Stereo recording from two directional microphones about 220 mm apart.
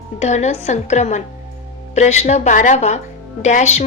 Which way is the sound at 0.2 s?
30° left (ahead or behind).